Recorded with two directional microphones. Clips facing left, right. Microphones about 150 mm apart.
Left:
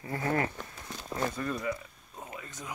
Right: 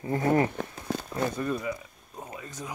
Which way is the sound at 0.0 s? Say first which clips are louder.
Right 6 dB; 20° right (ahead or behind).